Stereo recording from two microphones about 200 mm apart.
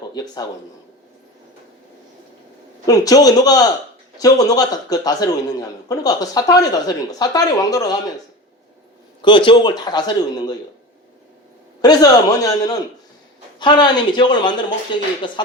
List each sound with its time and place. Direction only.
0.1 s speech: 20° left (ahead or behind)
2.8 s a man's voice: 15° left (ahead or behind)
9.2 s a man's voice: 25° left (ahead or behind)
11.8 s a man's voice: 20° left (ahead or behind)